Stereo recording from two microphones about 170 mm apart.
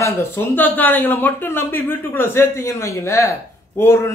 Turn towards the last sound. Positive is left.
turn(degrees=15)  # may be behind; listen again after turning